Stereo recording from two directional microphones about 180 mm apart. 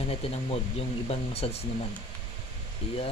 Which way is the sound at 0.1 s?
30° left (ahead or behind).